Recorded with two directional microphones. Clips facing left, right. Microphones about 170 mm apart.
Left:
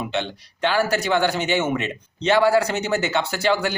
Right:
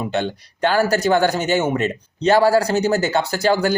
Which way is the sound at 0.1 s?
45° right (ahead or behind).